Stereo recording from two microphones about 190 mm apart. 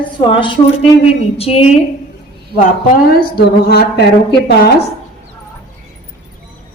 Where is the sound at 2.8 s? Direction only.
50° left (ahead or behind).